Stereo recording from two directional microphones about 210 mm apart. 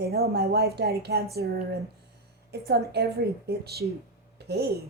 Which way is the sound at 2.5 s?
50° right (ahead or behind).